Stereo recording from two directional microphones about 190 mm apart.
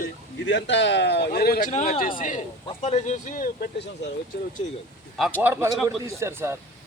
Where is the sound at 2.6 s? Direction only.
35° left (ahead or behind).